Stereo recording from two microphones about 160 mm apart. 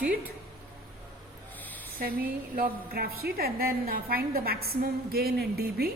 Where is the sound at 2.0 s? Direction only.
60° right (ahead or behind).